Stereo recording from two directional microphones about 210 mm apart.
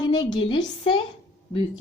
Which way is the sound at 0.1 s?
20° left (ahead or behind).